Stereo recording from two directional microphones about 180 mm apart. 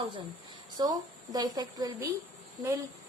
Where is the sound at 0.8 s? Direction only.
20° right (ahead or behind).